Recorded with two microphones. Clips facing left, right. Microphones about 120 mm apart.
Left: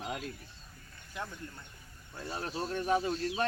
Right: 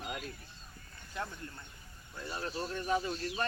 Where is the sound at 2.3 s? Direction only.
65° left (ahead or behind).